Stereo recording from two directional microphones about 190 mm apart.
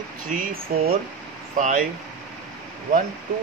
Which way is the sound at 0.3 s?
45° right (ahead or behind).